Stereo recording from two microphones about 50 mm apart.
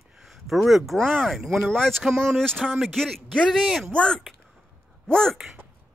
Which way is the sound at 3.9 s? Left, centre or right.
Centre.